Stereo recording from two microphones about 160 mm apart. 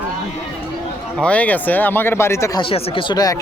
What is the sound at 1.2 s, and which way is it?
Speech, 10° left (ahead or behind).